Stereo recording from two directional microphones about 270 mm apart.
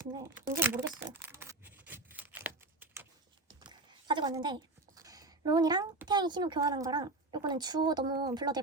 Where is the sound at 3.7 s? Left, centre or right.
Centre.